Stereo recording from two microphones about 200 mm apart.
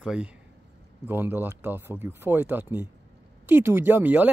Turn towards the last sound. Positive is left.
turn(degrees=-10)  # may be behind; listen again after turning